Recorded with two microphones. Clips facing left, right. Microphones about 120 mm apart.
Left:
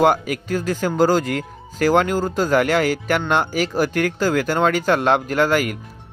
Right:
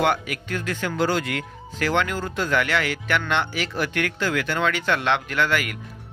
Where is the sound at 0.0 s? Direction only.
40° left (ahead or behind).